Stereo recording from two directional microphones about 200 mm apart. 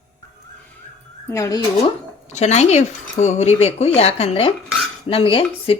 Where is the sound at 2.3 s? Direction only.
35° left (ahead or behind).